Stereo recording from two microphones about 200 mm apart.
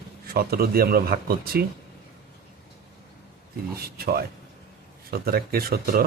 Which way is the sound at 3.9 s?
50° right (ahead or behind).